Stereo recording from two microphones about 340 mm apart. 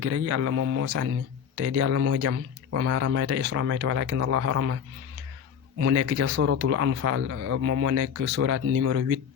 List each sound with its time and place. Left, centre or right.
0.0 s speech: right
5.8 s speech: right